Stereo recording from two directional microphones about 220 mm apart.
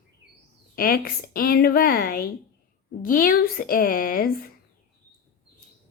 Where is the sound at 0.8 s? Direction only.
40° left (ahead or behind).